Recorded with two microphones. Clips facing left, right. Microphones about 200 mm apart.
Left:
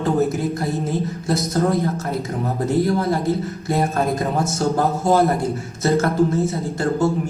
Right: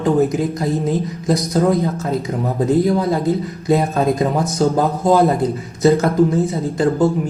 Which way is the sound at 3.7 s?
15° right (ahead or behind).